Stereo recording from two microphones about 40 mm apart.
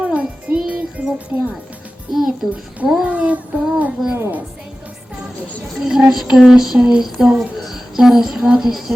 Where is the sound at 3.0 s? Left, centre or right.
Right.